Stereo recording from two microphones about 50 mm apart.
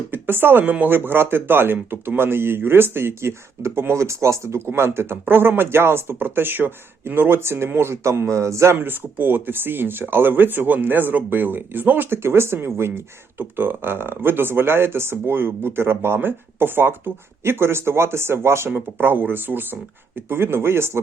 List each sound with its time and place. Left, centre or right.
0.1 s a sound: right
0.6 s speech: right
5.2 s a man's voice: right
8.7 s speech: right
17.4 s speech: right
18.7 s speech: right